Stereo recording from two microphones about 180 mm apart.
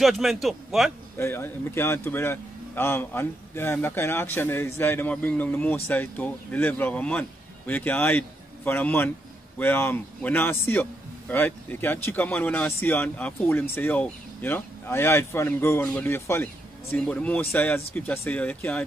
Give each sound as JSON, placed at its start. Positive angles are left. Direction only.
{"t": 0.0, "sound": "a man's voice", "side_deg": 0}
{"t": 1.1, "sound": "a man's voice", "side_deg": 10}